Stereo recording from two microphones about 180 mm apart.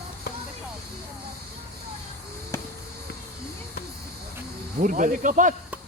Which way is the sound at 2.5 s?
15° left (ahead or behind).